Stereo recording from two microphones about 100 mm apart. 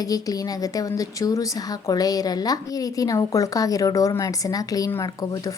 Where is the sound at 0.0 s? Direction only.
35° left (ahead or behind).